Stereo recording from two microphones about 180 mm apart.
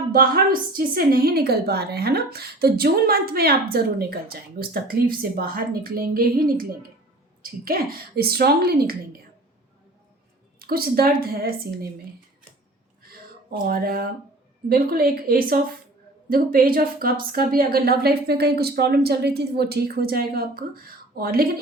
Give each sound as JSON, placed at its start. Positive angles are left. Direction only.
{"t": 0.1, "sound": "a woman's voice", "side_deg": -55}
{"t": 10.6, "sound": "a woman's voice", "side_deg": -55}
{"t": 13.0, "sound": "a sound", "side_deg": -55}
{"t": 14.7, "sound": "a woman's voice", "side_deg": -55}